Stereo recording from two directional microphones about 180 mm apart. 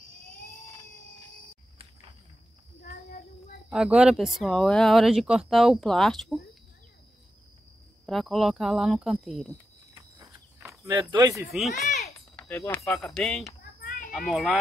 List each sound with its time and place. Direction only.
2.8 s child singing: 55° left (ahead or behind)
3.7 s speech: 5° right (ahead or behind)
8.1 s speech: centre (ahead or behind)
9.9 s a sound: 25° right (ahead or behind)
10.8 s speech: 20° right (ahead or behind)
11.5 s speech: centre (ahead or behind)
12.4 s speech: 10° left (ahead or behind)
13.8 s children playing: 50° left (ahead or behind)
14.1 s speech: centre (ahead or behind)